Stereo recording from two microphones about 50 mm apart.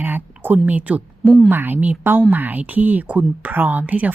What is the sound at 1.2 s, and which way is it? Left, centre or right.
Speech, centre.